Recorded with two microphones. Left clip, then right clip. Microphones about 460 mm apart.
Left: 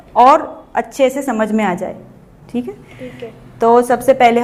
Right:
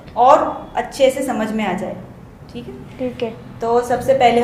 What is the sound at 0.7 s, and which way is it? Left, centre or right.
A woman's voice, left.